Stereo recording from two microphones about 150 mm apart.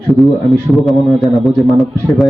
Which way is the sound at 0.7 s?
Centre (ahead or behind).